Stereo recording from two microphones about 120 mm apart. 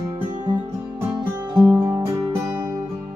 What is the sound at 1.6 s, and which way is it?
Music, 30° right (ahead or behind).